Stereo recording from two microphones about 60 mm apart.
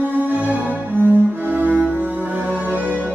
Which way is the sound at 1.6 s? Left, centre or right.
Left.